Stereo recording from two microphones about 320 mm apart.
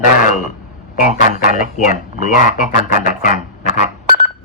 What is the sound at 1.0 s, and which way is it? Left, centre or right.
Speech, left.